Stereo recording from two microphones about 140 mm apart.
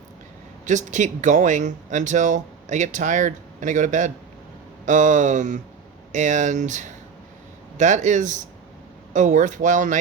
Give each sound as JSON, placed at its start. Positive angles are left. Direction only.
{"t": 0.6, "sound": "speech", "side_deg": -60}